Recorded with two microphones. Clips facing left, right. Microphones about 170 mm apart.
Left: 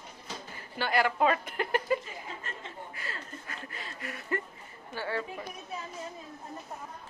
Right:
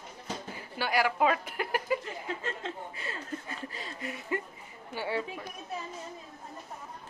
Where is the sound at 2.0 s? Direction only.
90° right.